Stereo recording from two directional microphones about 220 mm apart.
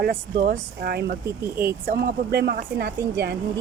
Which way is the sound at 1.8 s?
40° right (ahead or behind).